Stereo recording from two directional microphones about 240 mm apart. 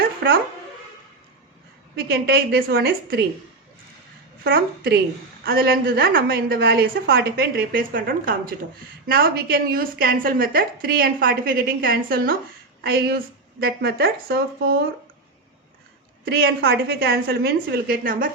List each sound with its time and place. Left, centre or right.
0.2 s speech: right
2.0 s a woman's voice: right
4.4 s a woman's voice: right
16.2 s a woman's voice: right